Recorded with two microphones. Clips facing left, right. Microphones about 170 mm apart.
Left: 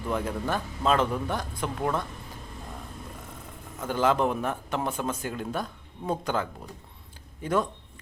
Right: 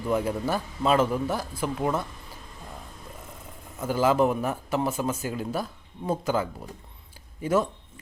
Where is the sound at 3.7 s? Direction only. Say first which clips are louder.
Right 2 dB; 5° right (ahead or behind).